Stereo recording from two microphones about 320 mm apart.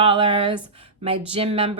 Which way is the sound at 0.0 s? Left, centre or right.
Centre.